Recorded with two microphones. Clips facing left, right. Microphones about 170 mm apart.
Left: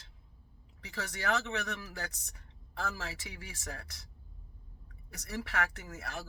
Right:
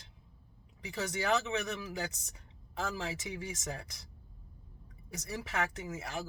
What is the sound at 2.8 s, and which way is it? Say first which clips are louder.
Speech: right 2 dB; 15° right (ahead or behind).